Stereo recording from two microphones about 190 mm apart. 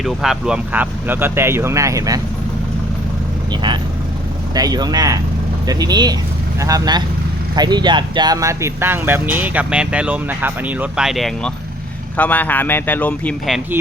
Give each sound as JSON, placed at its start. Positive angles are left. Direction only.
{"t": 0.0, "sound": "speech", "side_deg": 0}
{"t": 3.5, "sound": "speech", "side_deg": -25}